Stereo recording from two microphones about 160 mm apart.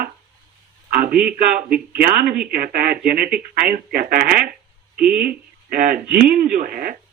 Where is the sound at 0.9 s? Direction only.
65° right (ahead or behind).